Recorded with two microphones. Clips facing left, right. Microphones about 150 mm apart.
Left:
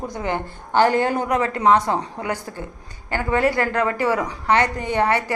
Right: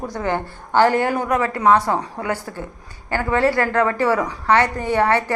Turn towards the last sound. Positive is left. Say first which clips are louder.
# right 2 dB
turn(degrees=15)  # may be behind; listen again after turning